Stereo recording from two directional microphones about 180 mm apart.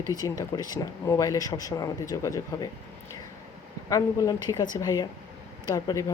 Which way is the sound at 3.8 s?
20° left (ahead or behind).